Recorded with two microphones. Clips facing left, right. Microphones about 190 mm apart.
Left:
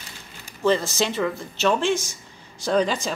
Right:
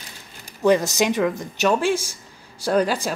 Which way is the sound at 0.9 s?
15° right (ahead or behind).